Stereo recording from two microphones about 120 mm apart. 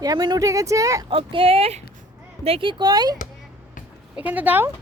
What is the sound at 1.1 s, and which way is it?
Speech, 50° right (ahead or behind).